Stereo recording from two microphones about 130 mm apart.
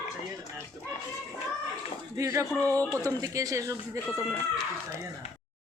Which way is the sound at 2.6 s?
15° left (ahead or behind).